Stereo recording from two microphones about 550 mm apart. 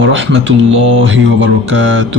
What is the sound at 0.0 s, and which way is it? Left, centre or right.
A man's voice, right.